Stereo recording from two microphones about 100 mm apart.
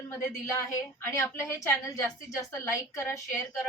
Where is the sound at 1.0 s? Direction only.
30° left (ahead or behind).